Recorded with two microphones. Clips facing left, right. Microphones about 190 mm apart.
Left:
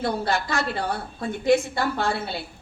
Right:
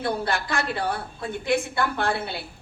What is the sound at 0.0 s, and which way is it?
Speech, 55° right (ahead or behind).